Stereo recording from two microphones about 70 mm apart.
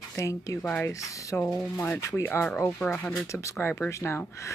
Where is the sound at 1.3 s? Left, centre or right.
Left.